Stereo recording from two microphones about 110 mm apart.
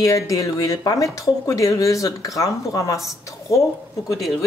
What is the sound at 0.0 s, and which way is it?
Speech, 30° left (ahead or behind).